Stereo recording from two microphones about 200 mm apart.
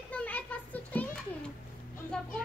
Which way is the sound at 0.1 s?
5° left (ahead or behind).